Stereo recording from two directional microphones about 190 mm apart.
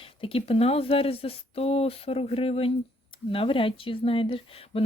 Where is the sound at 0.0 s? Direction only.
30° left (ahead or behind).